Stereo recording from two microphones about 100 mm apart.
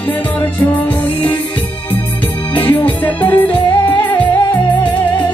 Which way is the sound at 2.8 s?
15° left (ahead or behind).